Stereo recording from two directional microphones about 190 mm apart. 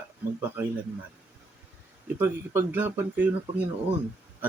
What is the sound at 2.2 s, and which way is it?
Speech, 10° right (ahead or behind).